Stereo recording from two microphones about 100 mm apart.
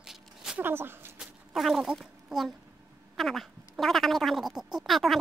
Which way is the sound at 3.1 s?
Centre (ahead or behind).